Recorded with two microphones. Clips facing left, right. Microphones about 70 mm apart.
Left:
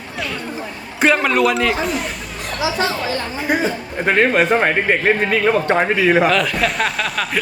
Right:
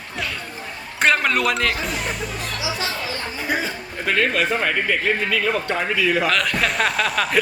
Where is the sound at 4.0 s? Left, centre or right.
Left.